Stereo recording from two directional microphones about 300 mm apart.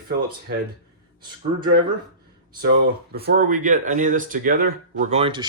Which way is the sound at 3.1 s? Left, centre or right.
Right.